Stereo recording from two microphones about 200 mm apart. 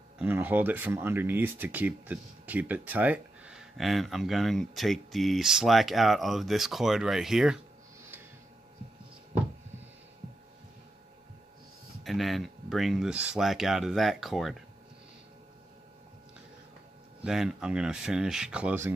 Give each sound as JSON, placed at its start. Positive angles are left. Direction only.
{"t": 0.2, "sound": "speech", "side_deg": -10}
{"t": 12.0, "sound": "speech", "side_deg": 0}
{"t": 17.2, "sound": "speech", "side_deg": 0}